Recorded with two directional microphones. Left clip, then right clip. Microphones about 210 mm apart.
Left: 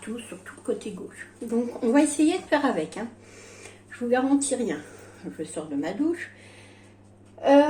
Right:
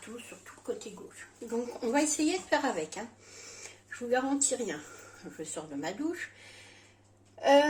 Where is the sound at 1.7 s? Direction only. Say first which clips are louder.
Left 7 dB; 10° right (ahead or behind).